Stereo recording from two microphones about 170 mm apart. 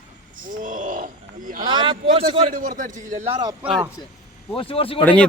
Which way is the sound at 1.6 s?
30° right (ahead or behind).